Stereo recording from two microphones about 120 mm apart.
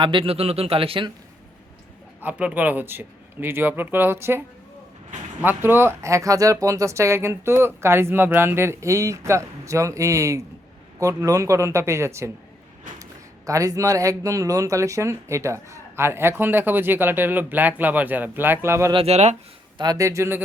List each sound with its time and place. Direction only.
0.0 s a man's voice: 45° right (ahead or behind)
2.2 s speech: 15° right (ahead or behind)
18.9 s speech: 60° right (ahead or behind)
19.8 s speech: 30° right (ahead or behind)